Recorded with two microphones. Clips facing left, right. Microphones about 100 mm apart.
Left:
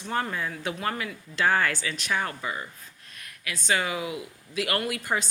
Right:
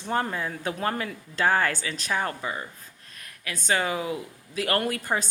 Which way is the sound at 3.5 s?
40° right (ahead or behind).